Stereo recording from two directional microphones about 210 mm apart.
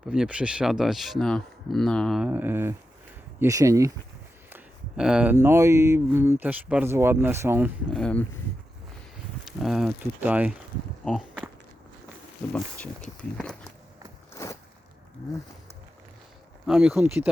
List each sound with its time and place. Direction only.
0.1 s speech: 5° right (ahead or behind)
7.9 s speech: 5° left (ahead or behind)
9.5 s speech: centre (ahead or behind)
11.0 s speech: 5° left (ahead or behind)
12.5 s speech: 5° left (ahead or behind)
14.3 s a sound: 15° left (ahead or behind)
16.6 s speech: 5° right (ahead or behind)